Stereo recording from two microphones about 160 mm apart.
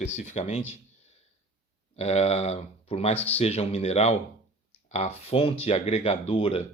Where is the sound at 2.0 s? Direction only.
40° left (ahead or behind).